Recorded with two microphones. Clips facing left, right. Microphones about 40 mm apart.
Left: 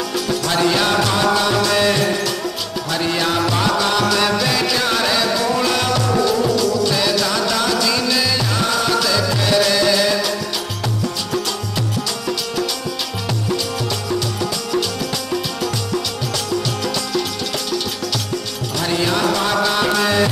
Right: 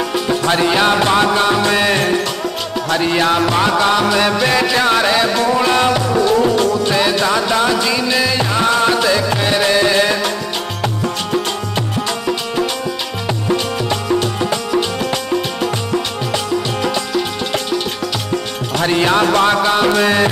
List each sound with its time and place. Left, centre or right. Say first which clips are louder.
0.1 s music: right 3 dB; right
13.3 s music: right 5 dB; right
18.8 s music: right 5 dB; right